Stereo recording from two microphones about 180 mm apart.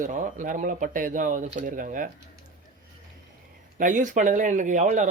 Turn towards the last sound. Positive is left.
turn(degrees=-45)  # may be behind; listen again after turning